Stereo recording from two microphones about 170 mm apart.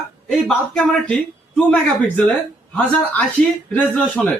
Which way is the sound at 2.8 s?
10° left (ahead or behind).